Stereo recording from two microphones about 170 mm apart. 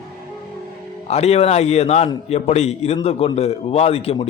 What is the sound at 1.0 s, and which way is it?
Speech, 40° left (ahead or behind).